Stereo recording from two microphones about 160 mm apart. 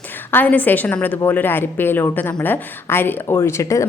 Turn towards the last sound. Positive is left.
turn(degrees=20)  # may be behind; listen again after turning